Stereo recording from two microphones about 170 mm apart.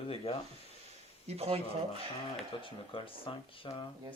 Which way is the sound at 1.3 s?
35° right (ahead or behind).